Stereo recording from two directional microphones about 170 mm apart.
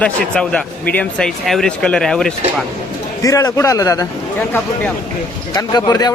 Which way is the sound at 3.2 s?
20° left (ahead or behind).